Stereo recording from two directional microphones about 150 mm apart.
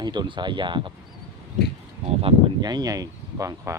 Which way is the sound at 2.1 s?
35° right (ahead or behind).